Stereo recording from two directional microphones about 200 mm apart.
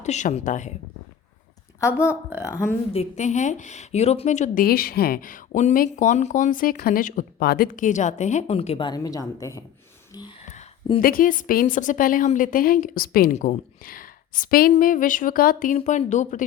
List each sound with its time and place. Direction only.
0.0 s speech: 35° left (ahead or behind)
2.0 s speech: 5° right (ahead or behind)
2.5 s speech: 15° left (ahead or behind)
2.9 s speech: 35° left (ahead or behind); by 9.6 s 15° left (ahead or behind)
10.1 s whispering: 20° left (ahead or behind)
10.5 s a sound: 30° left (ahead or behind)
11.0 s a woman's voice: 45° left (ahead or behind)